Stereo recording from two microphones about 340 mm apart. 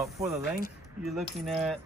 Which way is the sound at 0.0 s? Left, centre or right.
Centre.